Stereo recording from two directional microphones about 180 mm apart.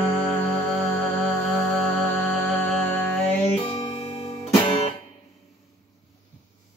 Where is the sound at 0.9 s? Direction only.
5° left (ahead or behind).